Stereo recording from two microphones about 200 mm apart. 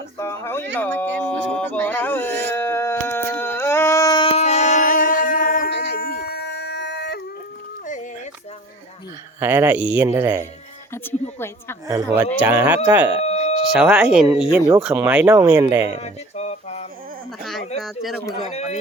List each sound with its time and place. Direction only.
0.2 s speech: 15° left (ahead or behind)
2.5 s a sound: 15° left (ahead or behind); by 5.7 s 45° left (ahead or behind)
6.0 s dog: 55° left (ahead or behind)
9.4 s speech: 10° right (ahead or behind)
10.9 s a woman's voice: 10° left (ahead or behind)
11.9 s speech: 20° right (ahead or behind)
13.2 s a sound: 30° left (ahead or behind)
13.7 s speech: 5° right (ahead or behind)
16.0 s a sound: 35° left (ahead or behind)
17.7 s speech: centre (ahead or behind)
18.4 s a man's voice: 35° left (ahead or behind)